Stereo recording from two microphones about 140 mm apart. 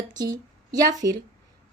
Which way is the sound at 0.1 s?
30° right (ahead or behind).